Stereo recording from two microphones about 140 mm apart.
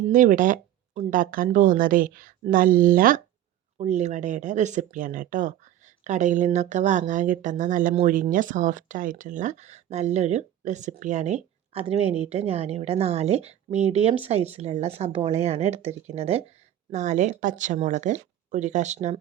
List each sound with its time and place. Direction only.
0.1 s speech: 70° right (ahead or behind); by 3.2 s 85° right
3.8 s speech: 55° right (ahead or behind)